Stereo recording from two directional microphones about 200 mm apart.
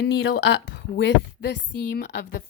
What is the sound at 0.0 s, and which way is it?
A woman's voice, 55° left (ahead or behind).